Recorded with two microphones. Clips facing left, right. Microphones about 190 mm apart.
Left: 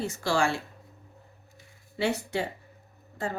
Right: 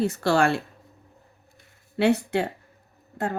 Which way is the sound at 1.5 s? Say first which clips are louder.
Right 8 dB; 60° right (ahead or behind).